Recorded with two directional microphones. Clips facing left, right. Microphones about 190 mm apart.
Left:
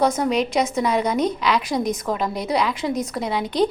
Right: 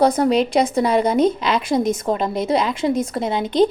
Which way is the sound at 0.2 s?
30° right (ahead or behind).